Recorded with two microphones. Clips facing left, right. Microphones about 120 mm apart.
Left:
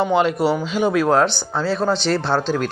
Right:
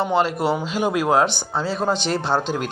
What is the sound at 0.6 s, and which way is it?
Speech, 5° right (ahead or behind).